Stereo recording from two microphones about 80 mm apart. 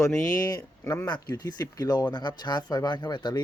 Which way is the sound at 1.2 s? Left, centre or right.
Left.